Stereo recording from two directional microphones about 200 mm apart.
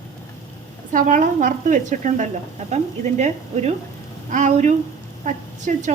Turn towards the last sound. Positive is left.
turn(degrees=-40)  # may be behind; listen again after turning